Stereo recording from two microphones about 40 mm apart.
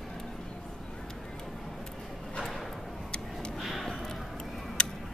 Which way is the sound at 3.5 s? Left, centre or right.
Centre.